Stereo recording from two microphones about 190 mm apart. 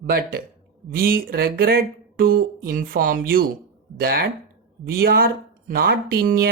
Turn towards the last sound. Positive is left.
turn(degrees=-50)  # may be behind; listen again after turning